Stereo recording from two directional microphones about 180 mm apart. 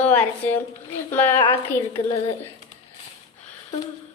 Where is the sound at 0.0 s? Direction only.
10° left (ahead or behind).